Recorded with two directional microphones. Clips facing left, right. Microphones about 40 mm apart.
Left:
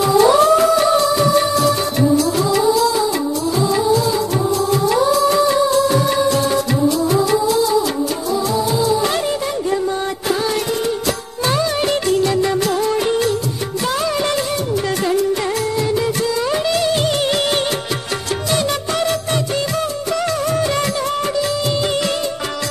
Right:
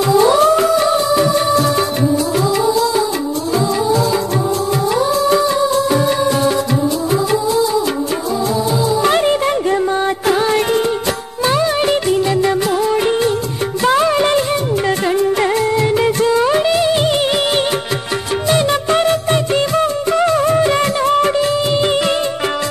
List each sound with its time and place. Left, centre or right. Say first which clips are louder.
5.9 s music: right 1 dB; right
9.0 s music: right 5 dB; right
11.4 s music: right 3 dB; centre
13.8 s music: right 7 dB; right
16.4 s music: right 4 dB; centre
18.5 s music: right 6 dB; right